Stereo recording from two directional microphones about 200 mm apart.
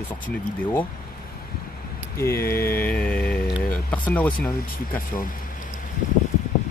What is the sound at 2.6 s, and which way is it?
Speech, 50° left (ahead or behind).